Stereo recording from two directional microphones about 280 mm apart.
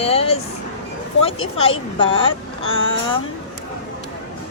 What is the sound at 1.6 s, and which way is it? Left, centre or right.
Speech, centre.